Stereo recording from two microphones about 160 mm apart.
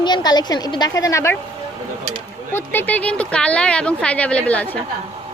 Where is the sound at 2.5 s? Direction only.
15° left (ahead or behind).